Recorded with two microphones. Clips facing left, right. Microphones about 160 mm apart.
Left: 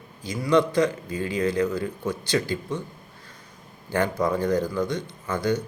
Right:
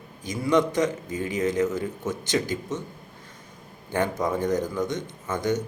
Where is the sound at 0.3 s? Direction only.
20° right (ahead or behind).